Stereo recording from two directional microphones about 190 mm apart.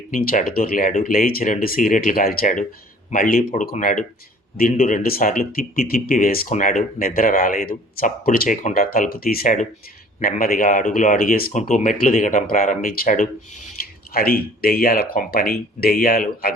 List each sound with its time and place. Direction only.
0.1 s speech: 45° left (ahead or behind)